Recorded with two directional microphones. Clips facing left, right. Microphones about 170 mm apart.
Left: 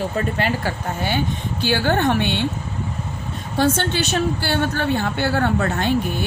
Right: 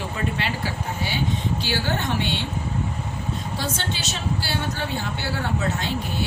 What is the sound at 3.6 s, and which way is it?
A woman's voice, 60° left (ahead or behind).